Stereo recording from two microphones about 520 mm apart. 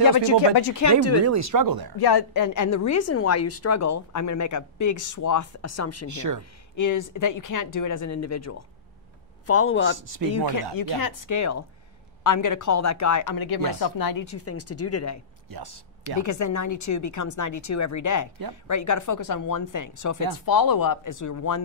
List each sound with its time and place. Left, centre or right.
0.0 s a woman's voice: left
1.2 s speech: right
2.0 s a woman's voice: left
6.0 s speech: right
6.8 s a woman's voice: left
10.3 s a woman's voice: left
15.5 s speech: right
16.2 s a woman's voice: left